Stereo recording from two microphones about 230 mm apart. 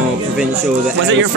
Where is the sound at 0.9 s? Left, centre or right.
Right.